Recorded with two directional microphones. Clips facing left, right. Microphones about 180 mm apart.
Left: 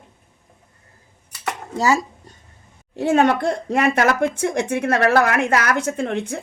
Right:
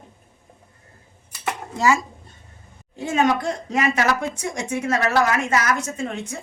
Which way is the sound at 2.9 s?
65° left (ahead or behind).